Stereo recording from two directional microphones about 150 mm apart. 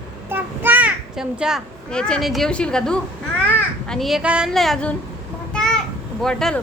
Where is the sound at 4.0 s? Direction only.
Centre (ahead or behind).